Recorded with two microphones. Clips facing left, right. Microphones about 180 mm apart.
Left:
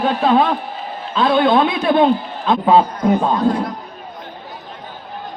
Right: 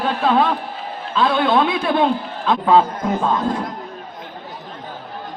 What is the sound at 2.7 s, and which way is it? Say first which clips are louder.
Speech: left 2 dB; 15° left (ahead or behind).